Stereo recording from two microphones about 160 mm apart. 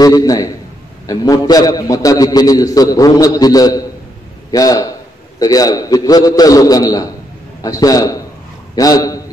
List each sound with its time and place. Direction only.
0.0 s a man's voice: 25° left (ahead or behind)